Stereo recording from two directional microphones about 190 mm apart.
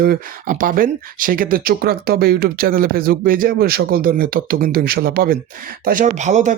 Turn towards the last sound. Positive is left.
turn(degrees=-40)  # may be behind; listen again after turning